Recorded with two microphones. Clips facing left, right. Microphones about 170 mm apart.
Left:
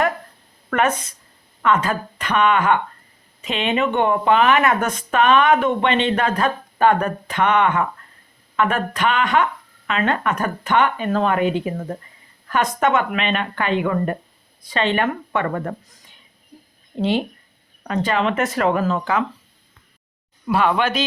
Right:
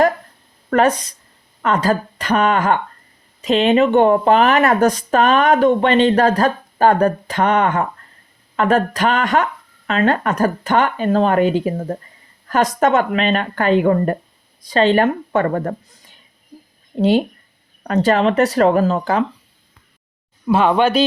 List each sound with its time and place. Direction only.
0.7 s speech: 35° right (ahead or behind)
17.0 s speech: 40° right (ahead or behind)
20.5 s speech: 25° right (ahead or behind)